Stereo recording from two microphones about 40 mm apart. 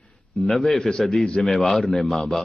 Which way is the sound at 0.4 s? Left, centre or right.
Centre.